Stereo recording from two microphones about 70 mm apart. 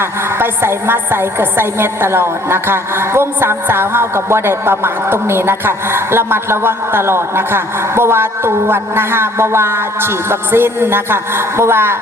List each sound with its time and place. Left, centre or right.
0.0 s a woman's voice: right